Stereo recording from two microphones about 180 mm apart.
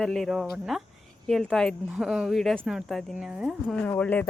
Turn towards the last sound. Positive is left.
turn(degrees=10)  # may be behind; listen again after turning